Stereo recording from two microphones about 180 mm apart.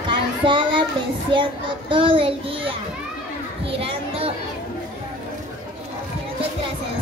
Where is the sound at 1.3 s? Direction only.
30° right (ahead or behind).